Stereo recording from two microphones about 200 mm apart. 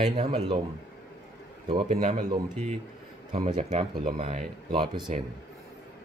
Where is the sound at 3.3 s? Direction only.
30° right (ahead or behind).